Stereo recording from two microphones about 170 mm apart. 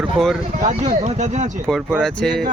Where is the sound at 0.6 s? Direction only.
45° right (ahead or behind).